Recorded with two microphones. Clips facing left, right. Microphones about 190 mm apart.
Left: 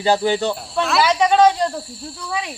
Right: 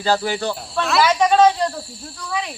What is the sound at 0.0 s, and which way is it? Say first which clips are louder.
Speech: left 3 dB; 20° left (ahead or behind).